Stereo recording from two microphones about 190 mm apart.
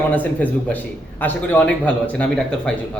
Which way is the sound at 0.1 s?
10° left (ahead or behind).